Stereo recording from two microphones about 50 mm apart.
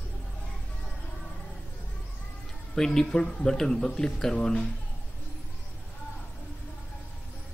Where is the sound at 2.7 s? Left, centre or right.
Centre.